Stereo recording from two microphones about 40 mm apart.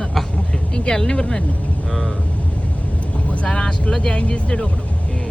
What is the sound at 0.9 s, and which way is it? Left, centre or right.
Speech, left.